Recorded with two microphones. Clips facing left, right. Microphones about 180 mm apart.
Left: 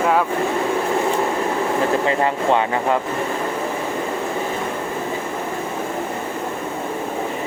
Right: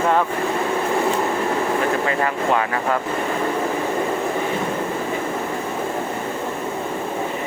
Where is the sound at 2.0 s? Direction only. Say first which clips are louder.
Left 2 dB; 25° left (ahead or behind).